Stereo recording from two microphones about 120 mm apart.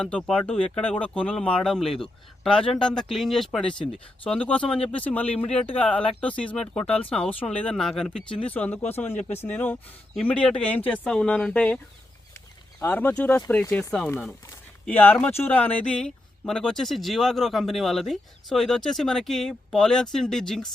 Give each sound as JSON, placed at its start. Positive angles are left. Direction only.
{"t": 0.0, "sound": "speech", "side_deg": 5}
{"t": 12.8, "sound": "speech", "side_deg": 15}